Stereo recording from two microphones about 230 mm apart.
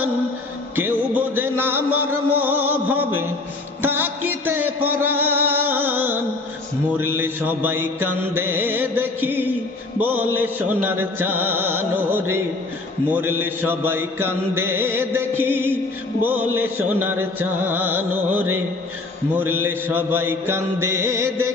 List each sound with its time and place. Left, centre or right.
0.8 s music: centre
7.2 s mantra: centre
7.9 s mantra: right
8.3 s mantra: centre
19.6 s mantra: centre